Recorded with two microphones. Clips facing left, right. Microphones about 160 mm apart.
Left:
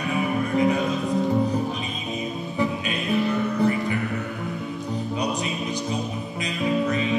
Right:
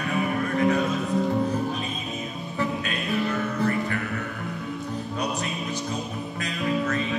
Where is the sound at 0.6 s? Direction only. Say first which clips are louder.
Left 1 dB; 10° left (ahead or behind).